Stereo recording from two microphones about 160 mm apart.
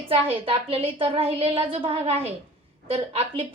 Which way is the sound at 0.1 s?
35° right (ahead or behind).